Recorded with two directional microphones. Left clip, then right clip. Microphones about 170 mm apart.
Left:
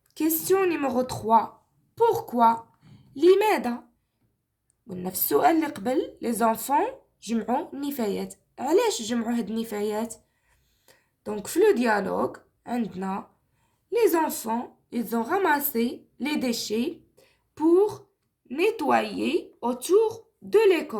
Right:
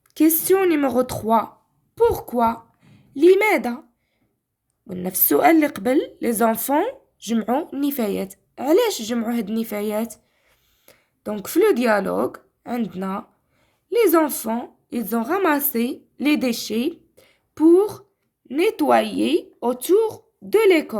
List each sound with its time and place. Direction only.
0.1 s speech: 55° right (ahead or behind)
2.0 s a woman's voice: 40° right (ahead or behind)
4.9 s a woman's voice: 50° right (ahead or behind)